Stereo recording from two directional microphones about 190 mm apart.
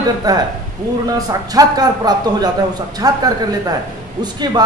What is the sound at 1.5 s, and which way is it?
Speech, 20° right (ahead or behind).